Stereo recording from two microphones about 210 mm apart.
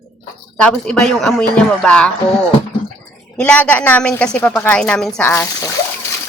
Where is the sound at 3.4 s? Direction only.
5° left (ahead or behind).